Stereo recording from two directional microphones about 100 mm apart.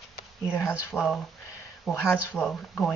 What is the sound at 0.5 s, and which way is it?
Speech, 20° left (ahead or behind).